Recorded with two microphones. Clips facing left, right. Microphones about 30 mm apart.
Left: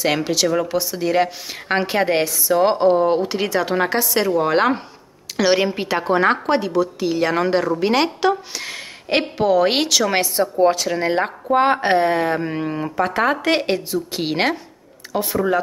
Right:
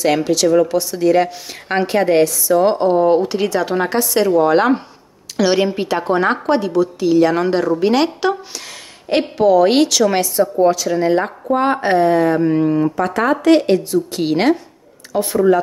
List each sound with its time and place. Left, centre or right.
0.0 s a woman's voice: centre
8.5 s a woman's voice: centre
10.7 s a woman's voice: left; by 14.6 s centre
15.1 s speech: centre